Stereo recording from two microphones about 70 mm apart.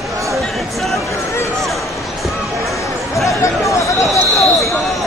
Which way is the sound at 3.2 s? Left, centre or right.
Left.